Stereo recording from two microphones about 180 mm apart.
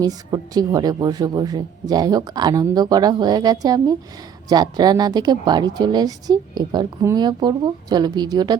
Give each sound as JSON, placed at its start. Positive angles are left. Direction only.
{"t": 0.0, "sound": "speech", "side_deg": -20}